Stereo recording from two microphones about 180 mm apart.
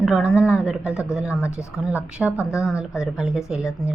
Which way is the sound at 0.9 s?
15° left (ahead or behind).